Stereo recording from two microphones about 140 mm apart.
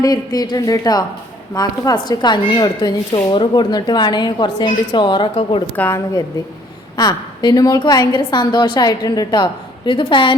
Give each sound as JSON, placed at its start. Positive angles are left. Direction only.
{"t": 0.0, "sound": "a woman's voice", "side_deg": 25}
{"t": 5.7, "sound": "a woman's voice", "side_deg": 10}
{"t": 6.9, "sound": "a woman's voice", "side_deg": 30}